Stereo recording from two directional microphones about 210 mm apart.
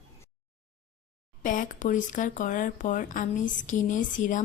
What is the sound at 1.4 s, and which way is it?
Speech, 40° left (ahead or behind).